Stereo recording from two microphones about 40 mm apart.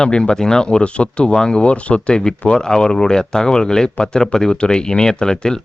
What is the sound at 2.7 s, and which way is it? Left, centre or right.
Speech, centre.